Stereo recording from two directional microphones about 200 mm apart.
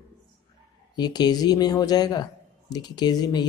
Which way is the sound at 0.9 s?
20° left (ahead or behind).